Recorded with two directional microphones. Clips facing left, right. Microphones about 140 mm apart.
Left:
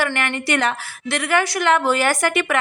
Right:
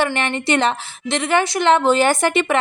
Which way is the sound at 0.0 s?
25° right (ahead or behind).